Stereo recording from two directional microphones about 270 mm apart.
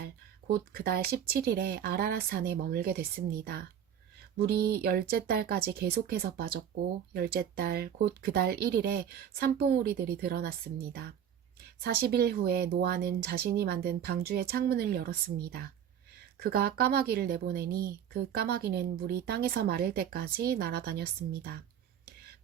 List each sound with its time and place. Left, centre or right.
0.0 s speech: right